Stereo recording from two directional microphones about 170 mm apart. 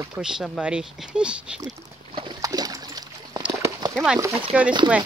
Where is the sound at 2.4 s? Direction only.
20° right (ahead or behind).